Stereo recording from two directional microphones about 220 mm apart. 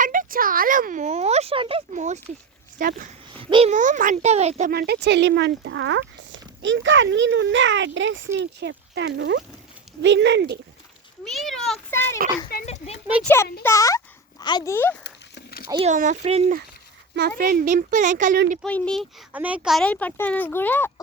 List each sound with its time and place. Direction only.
0.0 s a sound: 40° right (ahead or behind)
2.7 s a child's voice: 40° right (ahead or behind)
3.4 s a child's voice: 25° right (ahead or behind)
4.7 s speech: 45° right (ahead or behind)
11.3 s a child's voice: centre (ahead or behind)
12.6 s speech: 30° left (ahead or behind)
13.2 s speech: 10° left (ahead or behind)
15.0 s a sound: 45° left (ahead or behind)
15.8 s a child's voice: 35° right (ahead or behind)
17.2 s a child's voice: 40° right (ahead or behind)
18.6 s speech: 5° left (ahead or behind)